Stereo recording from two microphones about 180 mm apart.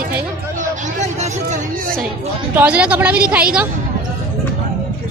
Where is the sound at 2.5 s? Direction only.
10° right (ahead or behind).